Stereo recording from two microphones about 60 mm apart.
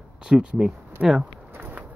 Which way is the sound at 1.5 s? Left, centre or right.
Right.